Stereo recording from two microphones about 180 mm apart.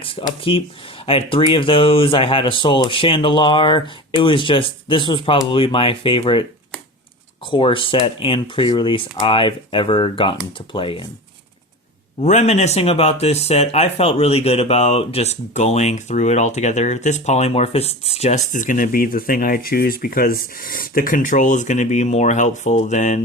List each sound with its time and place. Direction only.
0.0 s speech: 30° left (ahead or behind)
7.5 s speech: 30° left (ahead or behind)
12.2 s speech: 40° left (ahead or behind)